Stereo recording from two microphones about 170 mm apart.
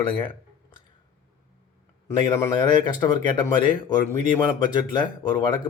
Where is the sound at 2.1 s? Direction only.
15° left (ahead or behind).